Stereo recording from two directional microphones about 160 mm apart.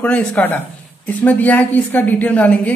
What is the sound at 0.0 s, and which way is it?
A woman's voice, 5° left (ahead or behind).